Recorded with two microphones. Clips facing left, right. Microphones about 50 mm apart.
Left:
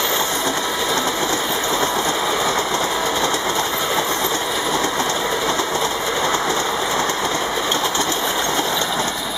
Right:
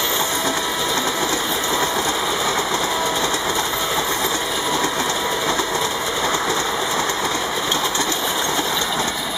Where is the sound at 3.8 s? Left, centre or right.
Left.